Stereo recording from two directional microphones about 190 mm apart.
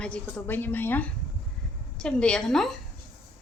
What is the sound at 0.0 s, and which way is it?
A woman's voice, 5° left (ahead or behind).